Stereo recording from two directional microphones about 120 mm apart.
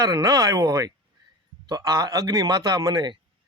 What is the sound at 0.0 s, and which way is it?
A man's voice, 30° right (ahead or behind).